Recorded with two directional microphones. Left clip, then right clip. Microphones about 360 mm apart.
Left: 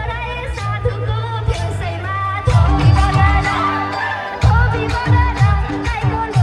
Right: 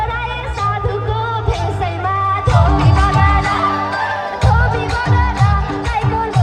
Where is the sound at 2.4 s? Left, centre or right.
Right.